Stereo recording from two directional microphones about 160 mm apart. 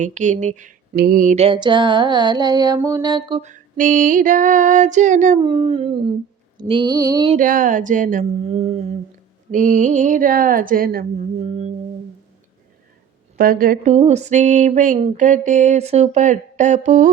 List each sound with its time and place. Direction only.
0.0 s female singing: 50° right (ahead or behind)
0.9 s speech: 65° right (ahead or behind)
1.4 s music: 30° right (ahead or behind)
3.4 s female singing: 50° right (ahead or behind)
5.4 s a sound: 35° right (ahead or behind)
6.6 s music: 25° right (ahead or behind)
7.3 s female singing: 55° right (ahead or behind)
9.5 s speech: 55° right (ahead or behind)
11.3 s female singing: 45° right (ahead or behind)
13.3 s female singing: 65° right (ahead or behind)